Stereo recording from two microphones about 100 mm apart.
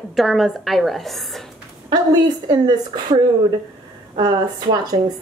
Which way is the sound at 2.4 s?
40° right (ahead or behind).